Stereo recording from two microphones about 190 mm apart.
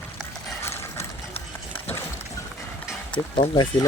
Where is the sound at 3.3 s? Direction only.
25° left (ahead or behind).